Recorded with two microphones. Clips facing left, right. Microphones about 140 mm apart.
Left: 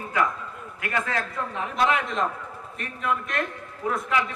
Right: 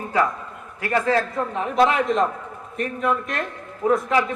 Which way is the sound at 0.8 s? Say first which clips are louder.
Right 8 dB; 30° right (ahead or behind).